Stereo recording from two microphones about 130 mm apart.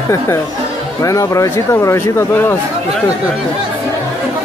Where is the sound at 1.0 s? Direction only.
25° left (ahead or behind).